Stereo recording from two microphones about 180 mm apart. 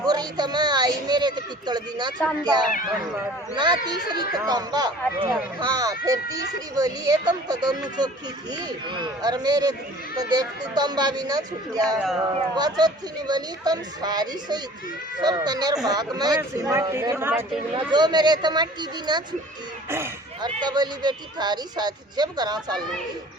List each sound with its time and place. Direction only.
0.0 s a sound: 20° right (ahead or behind)
2.4 s speech: 20° right (ahead or behind)
17.9 s speech: 25° right (ahead or behind)
20.4 s speech: 25° right (ahead or behind)